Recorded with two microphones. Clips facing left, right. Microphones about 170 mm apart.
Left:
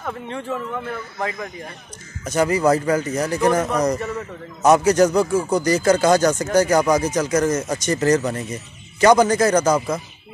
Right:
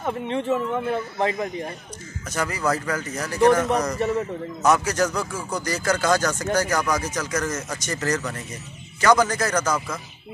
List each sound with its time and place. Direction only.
0.0 s a man's voice: 20° right (ahead or behind)
2.2 s a man's voice: 20° left (ahead or behind)